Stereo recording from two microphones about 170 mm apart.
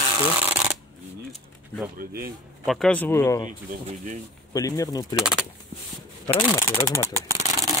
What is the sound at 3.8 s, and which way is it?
Speech, 45° right (ahead or behind).